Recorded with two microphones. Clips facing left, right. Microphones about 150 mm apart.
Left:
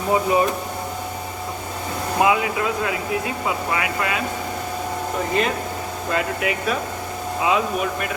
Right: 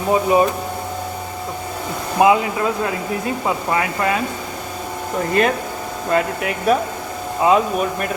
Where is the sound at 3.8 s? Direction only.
40° right (ahead or behind).